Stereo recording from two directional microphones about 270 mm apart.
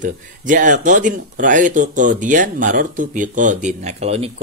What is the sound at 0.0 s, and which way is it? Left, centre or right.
Speech, right.